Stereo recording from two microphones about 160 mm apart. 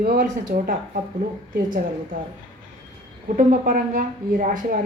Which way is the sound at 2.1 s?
60° right (ahead or behind).